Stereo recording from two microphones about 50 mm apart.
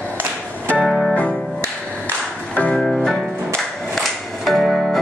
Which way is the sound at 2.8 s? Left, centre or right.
Centre.